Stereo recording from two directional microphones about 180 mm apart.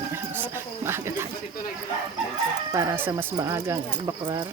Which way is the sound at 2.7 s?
15° right (ahead or behind).